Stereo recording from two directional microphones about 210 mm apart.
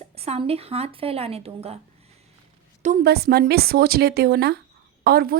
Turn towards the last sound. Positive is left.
turn(degrees=-45)  # may be behind; listen again after turning